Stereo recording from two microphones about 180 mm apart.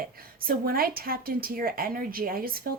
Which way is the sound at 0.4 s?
55° right (ahead or behind).